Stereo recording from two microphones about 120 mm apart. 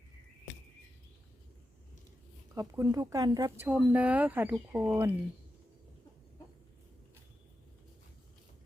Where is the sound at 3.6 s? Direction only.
10° right (ahead or behind).